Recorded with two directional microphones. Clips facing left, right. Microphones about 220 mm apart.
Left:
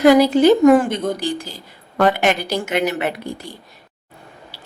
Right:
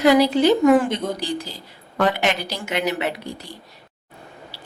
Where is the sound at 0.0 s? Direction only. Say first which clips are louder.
Left 4 dB; 50° left (ahead or behind).